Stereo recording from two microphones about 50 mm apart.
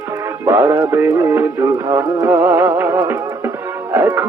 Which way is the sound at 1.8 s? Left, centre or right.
Right.